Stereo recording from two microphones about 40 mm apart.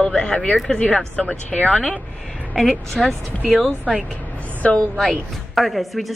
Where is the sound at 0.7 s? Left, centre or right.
Left.